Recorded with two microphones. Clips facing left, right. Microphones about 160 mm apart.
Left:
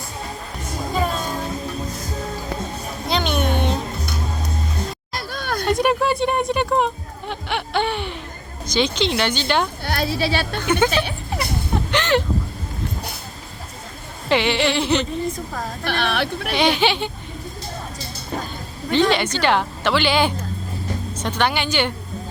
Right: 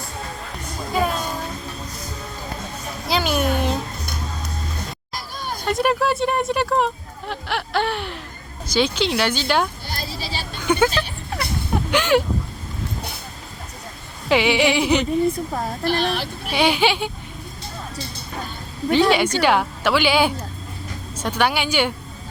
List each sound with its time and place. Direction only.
0.9 s music: 5° right (ahead or behind)
3.1 s a sound: 5° right (ahead or behind)
5.1 s hubbub: 70° left (ahead or behind)
5.6 s a sound: centre (ahead or behind)
8.6 s speech: 5° right (ahead or behind)
9.8 s speech: 65° left (ahead or behind)
10.6 s a woman's voice: 10° right (ahead or behind)
11.9 s a sound: 10° right (ahead or behind)
14.3 s a woman's voice: 5° right (ahead or behind)
15.8 s speech: 65° left (ahead or behind)
16.6 s a woman's voice: 10° right (ahead or behind)
18.9 s a woman's voice: 10° right (ahead or behind)